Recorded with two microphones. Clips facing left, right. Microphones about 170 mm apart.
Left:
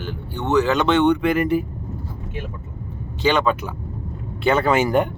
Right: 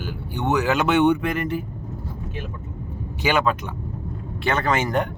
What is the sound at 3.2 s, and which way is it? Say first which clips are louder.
Speech: left 2 dB; 10° right (ahead or behind).